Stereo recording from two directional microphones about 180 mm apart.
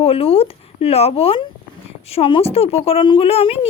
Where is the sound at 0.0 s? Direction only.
30° left (ahead or behind).